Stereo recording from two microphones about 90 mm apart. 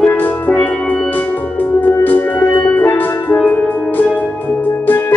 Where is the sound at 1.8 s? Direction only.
20° left (ahead or behind).